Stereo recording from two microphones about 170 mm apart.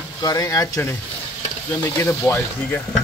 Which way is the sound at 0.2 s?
20° left (ahead or behind).